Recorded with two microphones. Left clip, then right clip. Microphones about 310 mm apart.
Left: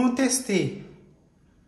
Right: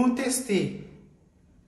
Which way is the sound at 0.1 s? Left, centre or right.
Left.